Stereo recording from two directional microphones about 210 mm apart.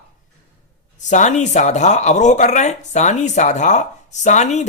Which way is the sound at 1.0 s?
35° left (ahead or behind).